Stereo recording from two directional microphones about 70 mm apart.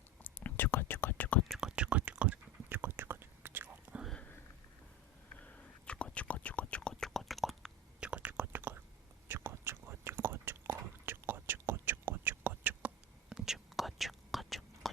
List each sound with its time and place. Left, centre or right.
0.3 s whispering: left
1.5 s whispering: centre; by 3.9 s right
5.3 s whispering: centre
8.0 s whispering: centre
13.3 s whispering: centre